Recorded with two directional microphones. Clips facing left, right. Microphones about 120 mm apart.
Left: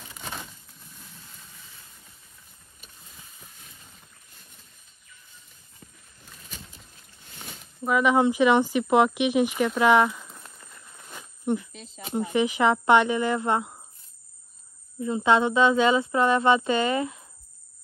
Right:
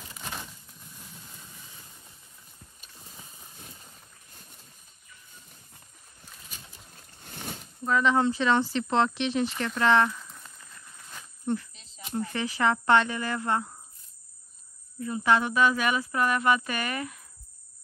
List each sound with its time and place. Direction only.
7.8 s speech: 15° left (ahead or behind)
11.7 s speech: 45° left (ahead or behind)
12.1 s speech: 15° left (ahead or behind)
15.0 s speech: 20° left (ahead or behind)